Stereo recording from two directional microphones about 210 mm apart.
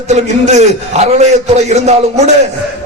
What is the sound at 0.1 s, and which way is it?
A man's voice, 35° right (ahead or behind).